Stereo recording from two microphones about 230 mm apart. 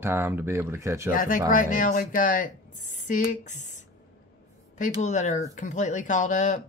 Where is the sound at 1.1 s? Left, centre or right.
Left.